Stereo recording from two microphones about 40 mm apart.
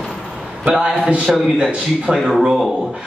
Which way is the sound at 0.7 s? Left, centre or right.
Right.